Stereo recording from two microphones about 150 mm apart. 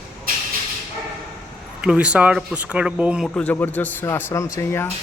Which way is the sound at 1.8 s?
5° right (ahead or behind).